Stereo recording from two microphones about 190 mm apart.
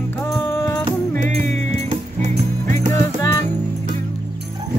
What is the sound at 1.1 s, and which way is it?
Music, 40° right (ahead or behind).